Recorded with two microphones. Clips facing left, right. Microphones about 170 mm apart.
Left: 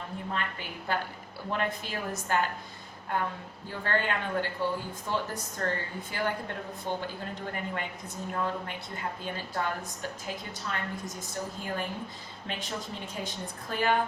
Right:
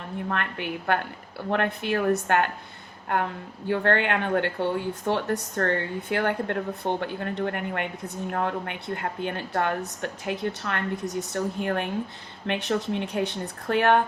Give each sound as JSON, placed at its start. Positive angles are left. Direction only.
{"t": 0.3, "sound": "a woman's voice", "side_deg": -65}